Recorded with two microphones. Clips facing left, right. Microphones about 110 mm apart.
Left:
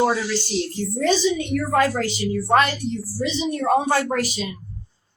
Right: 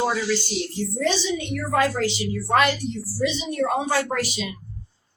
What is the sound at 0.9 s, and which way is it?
A woman's voice, 45° left (ahead or behind).